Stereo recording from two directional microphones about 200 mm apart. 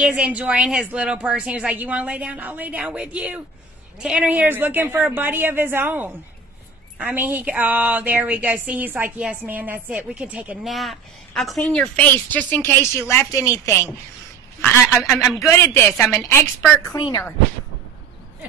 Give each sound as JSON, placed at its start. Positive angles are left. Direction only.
{"t": 0.0, "sound": "a woman's voice", "side_deg": -5}
{"t": 15.0, "sound": "a man's voice", "side_deg": 15}